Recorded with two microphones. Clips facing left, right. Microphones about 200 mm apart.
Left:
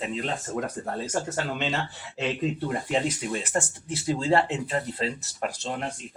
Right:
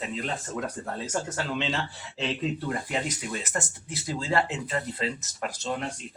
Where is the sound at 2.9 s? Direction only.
30° left (ahead or behind).